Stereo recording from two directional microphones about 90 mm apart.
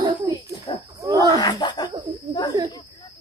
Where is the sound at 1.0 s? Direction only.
45° right (ahead or behind).